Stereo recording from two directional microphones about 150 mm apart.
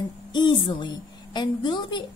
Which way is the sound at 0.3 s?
30° left (ahead or behind).